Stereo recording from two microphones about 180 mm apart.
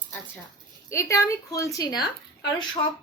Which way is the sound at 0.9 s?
15° left (ahead or behind).